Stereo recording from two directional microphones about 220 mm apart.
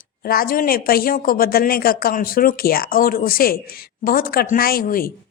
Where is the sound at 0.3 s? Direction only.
40° left (ahead or behind).